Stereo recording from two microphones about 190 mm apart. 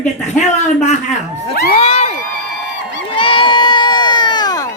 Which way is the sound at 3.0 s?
25° left (ahead or behind).